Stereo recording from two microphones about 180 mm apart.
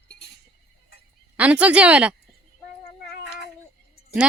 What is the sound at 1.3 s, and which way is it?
Speech, 10° right (ahead or behind).